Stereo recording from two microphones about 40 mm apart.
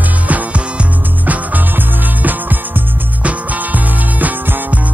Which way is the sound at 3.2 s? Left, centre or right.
Right.